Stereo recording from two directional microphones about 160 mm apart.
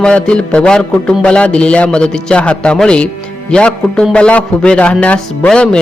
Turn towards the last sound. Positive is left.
turn(degrees=5)  # may be behind; listen again after turning